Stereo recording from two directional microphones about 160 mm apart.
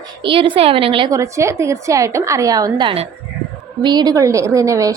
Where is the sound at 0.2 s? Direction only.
30° right (ahead or behind).